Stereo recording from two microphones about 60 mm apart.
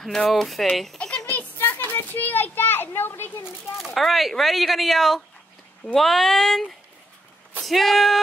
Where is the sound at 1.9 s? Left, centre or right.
Left.